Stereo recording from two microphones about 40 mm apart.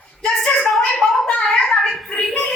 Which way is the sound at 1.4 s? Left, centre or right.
Left.